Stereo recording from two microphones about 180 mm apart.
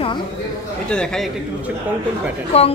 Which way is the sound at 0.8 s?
5° left (ahead or behind).